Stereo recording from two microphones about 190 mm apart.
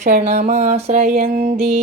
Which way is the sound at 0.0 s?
35° right (ahead or behind).